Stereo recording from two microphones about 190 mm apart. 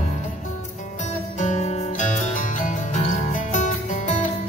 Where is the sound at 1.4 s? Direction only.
40° left (ahead or behind).